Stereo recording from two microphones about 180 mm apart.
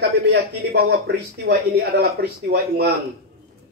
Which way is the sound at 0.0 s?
60° right (ahead or behind).